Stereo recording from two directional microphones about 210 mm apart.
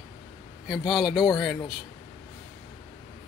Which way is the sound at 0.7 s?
Centre (ahead or behind).